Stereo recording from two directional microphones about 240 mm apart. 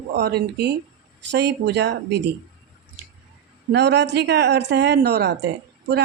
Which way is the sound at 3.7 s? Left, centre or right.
Right.